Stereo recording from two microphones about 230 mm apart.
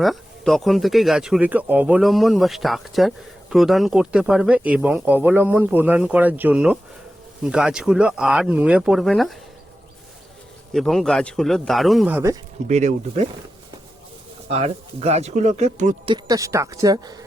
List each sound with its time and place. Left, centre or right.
0.0 s speech: centre
10.7 s speech: centre
12.6 s speech: right
14.5 s speech: right
16.1 s speech: centre